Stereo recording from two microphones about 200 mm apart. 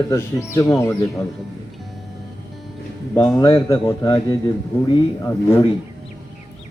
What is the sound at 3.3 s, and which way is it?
Speech, 20° left (ahead or behind).